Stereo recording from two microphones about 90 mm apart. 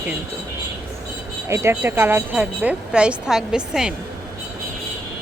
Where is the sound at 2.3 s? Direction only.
15° right (ahead or behind).